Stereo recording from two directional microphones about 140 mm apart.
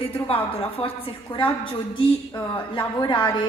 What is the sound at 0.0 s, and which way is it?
A woman's voice, 40° left (ahead or behind).